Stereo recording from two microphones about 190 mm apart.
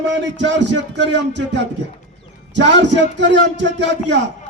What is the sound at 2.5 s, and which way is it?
A man's voice, 65° right (ahead or behind).